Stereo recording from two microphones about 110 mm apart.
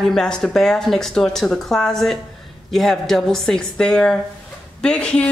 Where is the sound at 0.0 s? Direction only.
5° left (ahead or behind).